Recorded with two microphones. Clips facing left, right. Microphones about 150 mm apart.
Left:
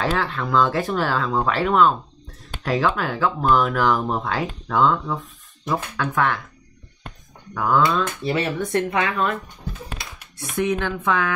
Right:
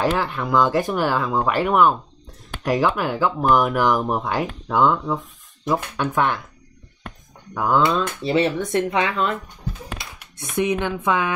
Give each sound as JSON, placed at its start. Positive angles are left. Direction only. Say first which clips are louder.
{"t": 0.0, "sound": "speech", "louder": "right 2 dB", "side_deg": -15}
{"t": 7.5, "sound": "speech", "louder": "right 1 dB", "side_deg": -20}
{"t": 10.5, "sound": "speech", "louder": "right 1 dB", "side_deg": -20}